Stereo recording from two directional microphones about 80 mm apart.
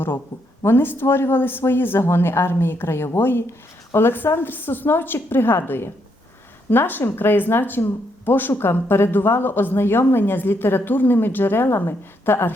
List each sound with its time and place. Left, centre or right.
0.6 s speech: left